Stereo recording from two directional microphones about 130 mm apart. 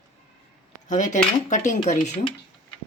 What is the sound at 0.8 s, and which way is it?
A woman's voice, 70° left (ahead or behind).